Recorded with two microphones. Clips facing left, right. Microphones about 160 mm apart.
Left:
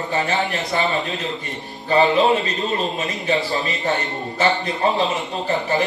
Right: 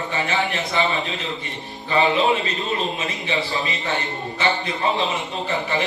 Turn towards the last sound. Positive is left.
turn(degrees=40)  # may be behind; listen again after turning